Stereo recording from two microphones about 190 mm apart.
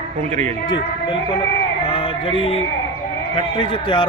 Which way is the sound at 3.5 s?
25° left (ahead or behind).